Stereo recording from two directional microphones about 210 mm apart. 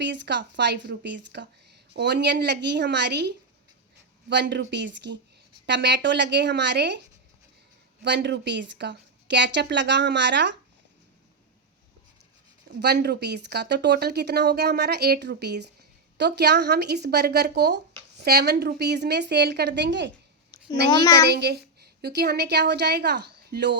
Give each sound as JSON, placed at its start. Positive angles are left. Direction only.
{"t": 0.0, "sound": "a woman's voice", "side_deg": -55}
{"t": 8.0, "sound": "a woman's voice", "side_deg": -55}
{"t": 12.6, "sound": "speech", "side_deg": -50}
{"t": 20.9, "sound": "a child's voice", "side_deg": 20}
{"t": 21.2, "sound": "a woman's voice", "side_deg": -50}